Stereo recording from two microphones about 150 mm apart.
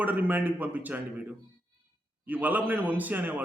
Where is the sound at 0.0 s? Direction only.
10° right (ahead or behind).